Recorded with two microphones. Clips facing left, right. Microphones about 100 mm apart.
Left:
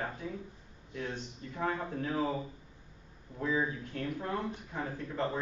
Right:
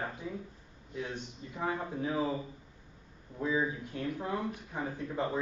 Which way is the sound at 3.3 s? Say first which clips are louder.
Right 1 dB; 15° right (ahead or behind).